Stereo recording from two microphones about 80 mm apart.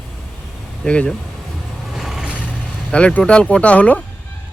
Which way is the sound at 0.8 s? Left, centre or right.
Centre.